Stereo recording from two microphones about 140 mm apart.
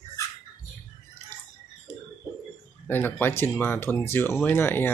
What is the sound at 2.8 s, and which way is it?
Speech, 15° left (ahead or behind).